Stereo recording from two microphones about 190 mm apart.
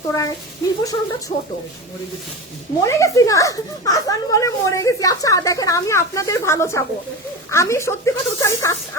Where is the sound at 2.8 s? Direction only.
15° left (ahead or behind).